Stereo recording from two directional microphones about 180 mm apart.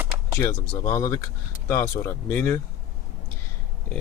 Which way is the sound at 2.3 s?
10° left (ahead or behind).